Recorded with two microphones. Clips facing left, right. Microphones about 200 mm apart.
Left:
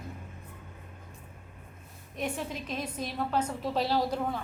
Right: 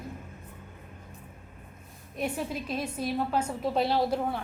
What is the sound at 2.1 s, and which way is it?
A woman's voice, 10° right (ahead or behind).